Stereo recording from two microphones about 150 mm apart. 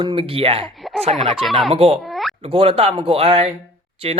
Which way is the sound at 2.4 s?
40° right (ahead or behind).